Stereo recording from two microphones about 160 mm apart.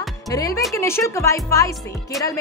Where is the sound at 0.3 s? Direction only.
20° left (ahead or behind).